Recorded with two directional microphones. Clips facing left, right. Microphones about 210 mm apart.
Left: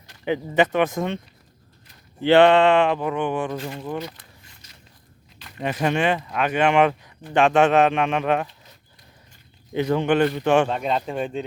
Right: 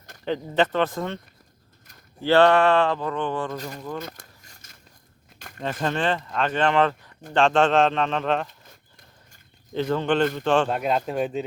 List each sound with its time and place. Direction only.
0.3 s speech: 10° left (ahead or behind)
2.2 s speech: 20° left (ahead or behind)
4.0 s a sound: 45° right (ahead or behind)
5.6 s speech: 15° left (ahead or behind)
9.7 s speech: 15° left (ahead or behind)
10.7 s a man's voice: 5° right (ahead or behind)